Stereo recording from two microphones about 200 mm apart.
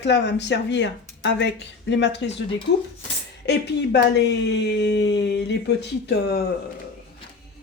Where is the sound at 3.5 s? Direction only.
60° left (ahead or behind).